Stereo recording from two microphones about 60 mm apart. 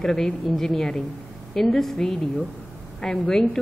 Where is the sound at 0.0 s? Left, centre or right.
Centre.